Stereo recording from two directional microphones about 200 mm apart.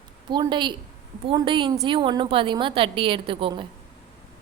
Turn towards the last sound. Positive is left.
turn(degrees=-25)  # may be behind; listen again after turning